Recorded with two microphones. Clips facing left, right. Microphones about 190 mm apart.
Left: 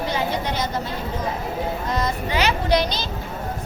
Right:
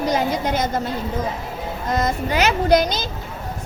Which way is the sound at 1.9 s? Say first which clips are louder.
Right 6 dB; 45° right (ahead or behind).